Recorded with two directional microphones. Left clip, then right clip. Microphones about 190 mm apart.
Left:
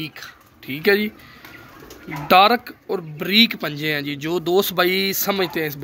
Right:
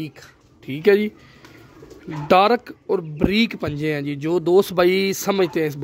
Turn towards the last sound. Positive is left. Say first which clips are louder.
# right 2 dB
turn(degrees=-65)  # may be behind; listen again after turning